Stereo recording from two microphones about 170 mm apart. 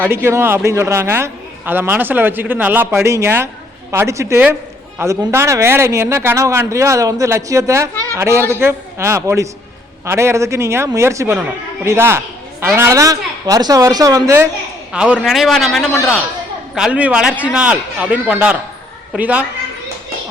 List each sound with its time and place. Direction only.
0.0 s a man's voice: 15° right (ahead or behind)
14.9 s a man's voice: 5° right (ahead or behind)